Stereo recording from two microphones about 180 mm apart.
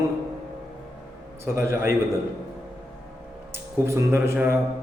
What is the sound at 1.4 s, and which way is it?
Speech, 15° right (ahead or behind).